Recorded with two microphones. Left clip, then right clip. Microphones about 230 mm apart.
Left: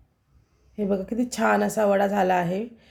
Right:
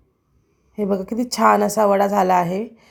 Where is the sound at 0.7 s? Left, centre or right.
Centre.